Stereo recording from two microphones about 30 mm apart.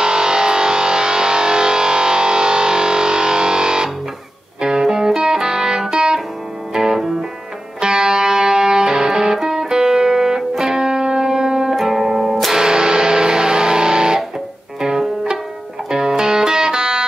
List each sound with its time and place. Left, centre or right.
0.0 s music: right
11.7 s music: centre
12.5 s music: right